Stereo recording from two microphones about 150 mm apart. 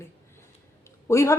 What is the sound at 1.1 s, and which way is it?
Speech, 20° left (ahead or behind).